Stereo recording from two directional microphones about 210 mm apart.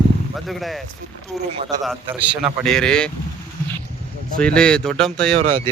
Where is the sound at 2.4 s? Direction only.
5° left (ahead or behind).